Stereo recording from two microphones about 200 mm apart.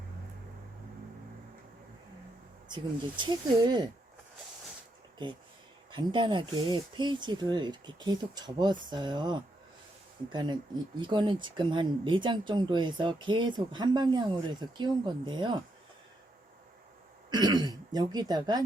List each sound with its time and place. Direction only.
2.6 s speech: 20° right (ahead or behind)
5.9 s speech: 20° right (ahead or behind)
17.3 s speech: 20° right (ahead or behind)